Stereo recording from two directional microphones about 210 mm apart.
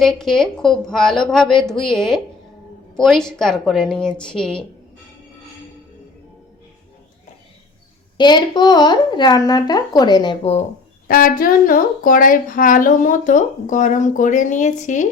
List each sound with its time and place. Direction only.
0.0 s a woman's voice: centre (ahead or behind)
8.2 s a woman's voice: 20° left (ahead or behind)
11.1 s speech: 45° left (ahead or behind)